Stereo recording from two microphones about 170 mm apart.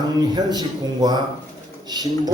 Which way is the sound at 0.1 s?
25° right (ahead or behind).